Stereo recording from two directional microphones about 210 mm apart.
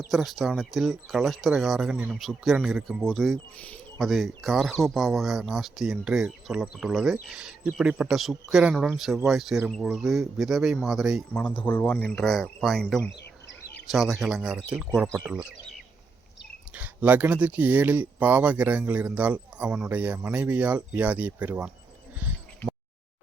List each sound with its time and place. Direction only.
0.1 s speech: centre (ahead or behind)
13.1 s bird: 55° left (ahead or behind)
13.8 s speech: centre (ahead or behind)
16.7 s speech: 10° right (ahead or behind)